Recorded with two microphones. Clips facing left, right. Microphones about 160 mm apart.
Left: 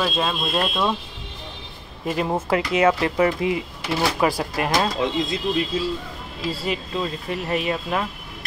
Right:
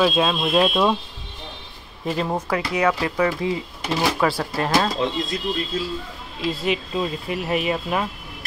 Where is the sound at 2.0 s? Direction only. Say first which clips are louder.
Left 1 dB; 5° left (ahead or behind).